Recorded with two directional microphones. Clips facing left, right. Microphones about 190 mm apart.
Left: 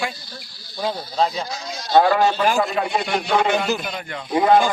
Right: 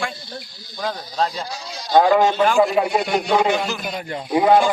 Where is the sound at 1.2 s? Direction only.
10° left (ahead or behind).